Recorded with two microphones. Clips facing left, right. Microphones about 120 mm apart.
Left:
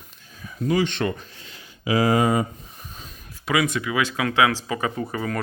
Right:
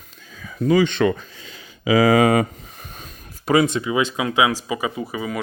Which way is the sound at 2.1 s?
85° right.